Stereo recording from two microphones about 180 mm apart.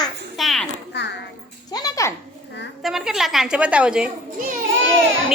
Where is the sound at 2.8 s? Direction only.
5° right (ahead or behind).